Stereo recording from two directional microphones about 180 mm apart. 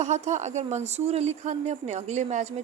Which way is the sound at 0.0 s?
40° right (ahead or behind).